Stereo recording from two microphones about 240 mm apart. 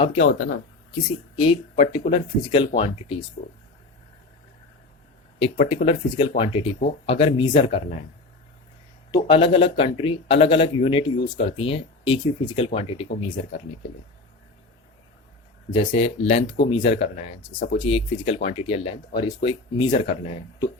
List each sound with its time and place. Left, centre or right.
0.0 s speech: left
1.5 s speech: left
3.4 s speech: left
5.4 s speech: left
9.1 s speech: left
15.7 s speech: left